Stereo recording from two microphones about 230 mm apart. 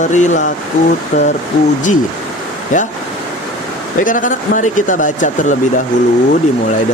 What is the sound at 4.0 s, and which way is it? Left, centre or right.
Speech, left.